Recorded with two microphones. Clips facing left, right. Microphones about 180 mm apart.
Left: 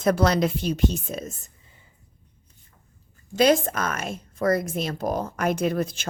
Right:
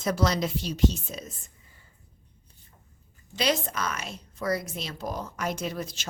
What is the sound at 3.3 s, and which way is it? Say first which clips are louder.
A woman's voice: left 8 dB; 50° left (ahead or behind).